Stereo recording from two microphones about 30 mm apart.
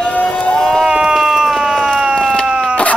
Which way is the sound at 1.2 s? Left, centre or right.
Centre.